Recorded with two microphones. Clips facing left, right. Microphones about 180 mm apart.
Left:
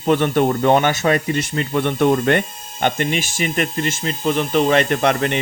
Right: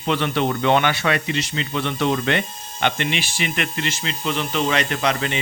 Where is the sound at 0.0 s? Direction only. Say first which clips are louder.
Left 5 dB; 45° left (ahead or behind).